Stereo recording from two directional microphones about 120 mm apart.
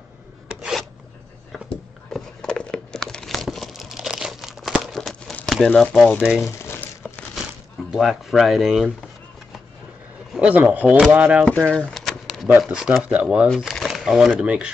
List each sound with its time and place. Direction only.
0.6 s filing: centre (ahead or behind)
1.5 s crumpling: 5° left (ahead or behind)
5.3 s speech: 5° left (ahead or behind)
6.2 s speech: 5° right (ahead or behind)
6.6 s crumpling: 20° left (ahead or behind)
7.9 s speech: 5° right (ahead or behind)
10.3 s speech: 10° right (ahead or behind)
11.4 s a sound: 10° left (ahead or behind)
12.4 s speech: 15° right (ahead or behind)
13.6 s shuffling cards: centre (ahead or behind)
14.4 s speech: 10° right (ahead or behind)